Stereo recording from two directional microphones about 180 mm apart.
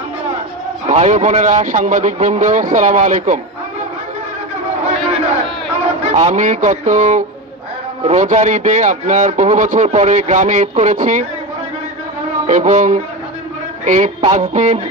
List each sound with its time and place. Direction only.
0.8 s speech: 40° right (ahead or behind)
6.1 s a man's voice: 40° right (ahead or behind)
12.4 s a man's voice: 45° right (ahead or behind)